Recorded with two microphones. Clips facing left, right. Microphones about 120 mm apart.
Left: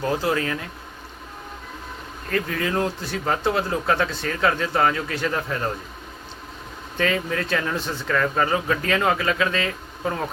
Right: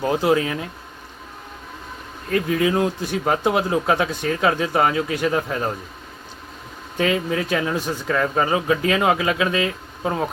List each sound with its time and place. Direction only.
0.0 s speech: 15° right (ahead or behind)
2.3 s speech: 15° right (ahead or behind)
6.9 s speech: 10° right (ahead or behind)